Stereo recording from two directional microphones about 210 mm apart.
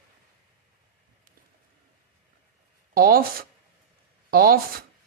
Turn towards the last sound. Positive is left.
turn(degrees=-45)  # may be behind; listen again after turning